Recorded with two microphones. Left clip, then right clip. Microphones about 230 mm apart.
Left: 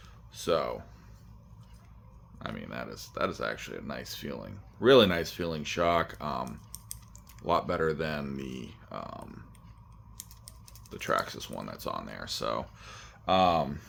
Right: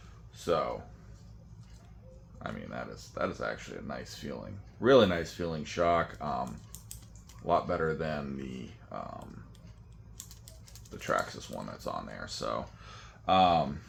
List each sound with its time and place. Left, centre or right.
0.3 s speech: left
2.4 s speech: left
10.9 s speech: left